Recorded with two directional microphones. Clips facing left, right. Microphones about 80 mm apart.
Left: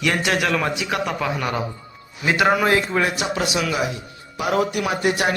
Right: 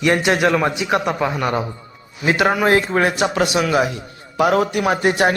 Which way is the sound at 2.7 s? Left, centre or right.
Right.